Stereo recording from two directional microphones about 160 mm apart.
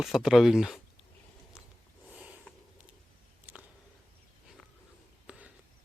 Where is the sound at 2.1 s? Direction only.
10° right (ahead or behind).